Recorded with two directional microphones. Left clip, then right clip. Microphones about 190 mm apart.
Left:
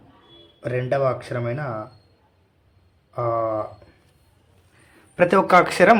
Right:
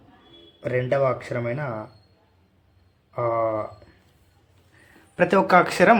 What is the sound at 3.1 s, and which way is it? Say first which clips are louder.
Speech: even; 10° left (ahead or behind).